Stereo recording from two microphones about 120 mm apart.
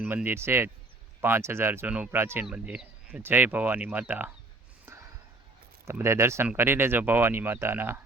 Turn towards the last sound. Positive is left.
turn(degrees=-20)  # may be behind; listen again after turning